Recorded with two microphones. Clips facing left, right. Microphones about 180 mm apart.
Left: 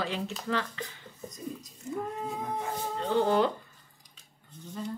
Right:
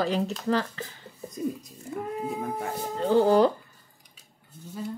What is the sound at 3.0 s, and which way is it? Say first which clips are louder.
Speech: right 6 dB; 40° right (ahead or behind).